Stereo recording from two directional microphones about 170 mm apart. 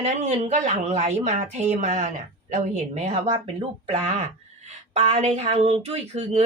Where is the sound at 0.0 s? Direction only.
40° right (ahead or behind).